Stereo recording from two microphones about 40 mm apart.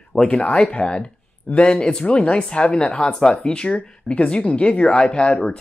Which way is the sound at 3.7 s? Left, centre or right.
Left.